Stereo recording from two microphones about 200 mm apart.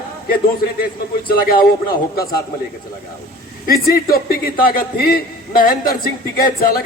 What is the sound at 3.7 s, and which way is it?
A man's voice, 50° left (ahead or behind).